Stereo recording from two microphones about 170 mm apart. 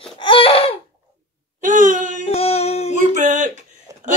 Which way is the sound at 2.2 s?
35° left (ahead or behind).